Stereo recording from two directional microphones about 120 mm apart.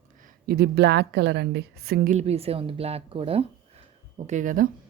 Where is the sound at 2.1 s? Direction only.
60° right (ahead or behind).